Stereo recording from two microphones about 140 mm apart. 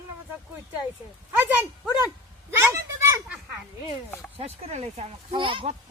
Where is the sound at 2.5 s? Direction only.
20° right (ahead or behind).